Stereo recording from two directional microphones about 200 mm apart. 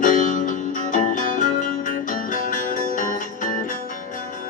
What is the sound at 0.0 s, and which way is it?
Music, 40° left (ahead or behind).